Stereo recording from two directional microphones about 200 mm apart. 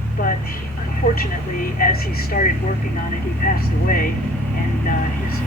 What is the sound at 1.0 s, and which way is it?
Speech, 50° left (ahead or behind).